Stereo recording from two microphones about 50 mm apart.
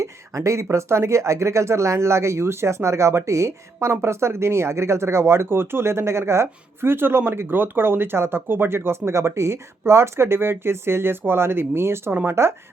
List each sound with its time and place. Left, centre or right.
0.0 s speech: right